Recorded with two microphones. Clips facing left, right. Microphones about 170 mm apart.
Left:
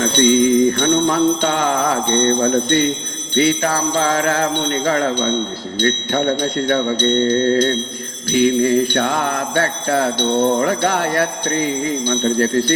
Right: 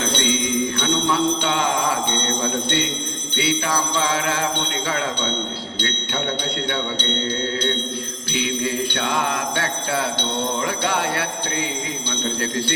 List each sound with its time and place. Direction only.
0.0 s jingle bell: 45° left (ahead or behind)